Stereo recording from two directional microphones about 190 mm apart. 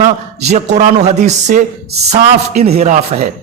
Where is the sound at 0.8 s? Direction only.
35° right (ahead or behind).